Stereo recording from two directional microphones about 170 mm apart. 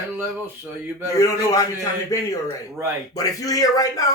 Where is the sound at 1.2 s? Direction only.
20° left (ahead or behind).